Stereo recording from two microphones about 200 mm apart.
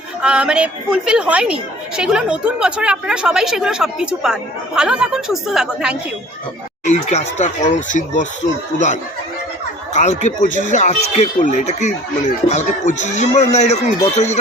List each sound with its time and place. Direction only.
0.2 s a woman's voice: 5° right (ahead or behind)
6.8 s speech: 35° left (ahead or behind)
9.9 s speech: 35° left (ahead or behind)